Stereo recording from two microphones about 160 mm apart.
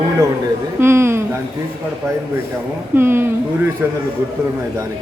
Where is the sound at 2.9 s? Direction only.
15° right (ahead or behind).